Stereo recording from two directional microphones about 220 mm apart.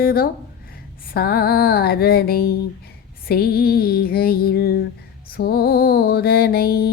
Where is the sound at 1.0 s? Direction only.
45° left (ahead or behind).